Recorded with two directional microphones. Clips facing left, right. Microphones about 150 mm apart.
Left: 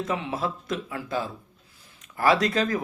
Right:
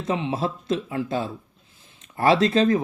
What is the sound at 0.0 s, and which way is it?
Speech, 25° right (ahead or behind).